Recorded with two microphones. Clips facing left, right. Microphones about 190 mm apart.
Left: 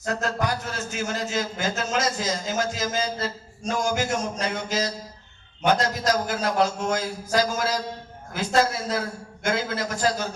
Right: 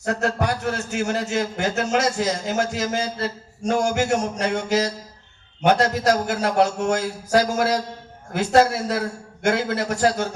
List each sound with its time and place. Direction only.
0.0 s a man's voice: 65° right (ahead or behind)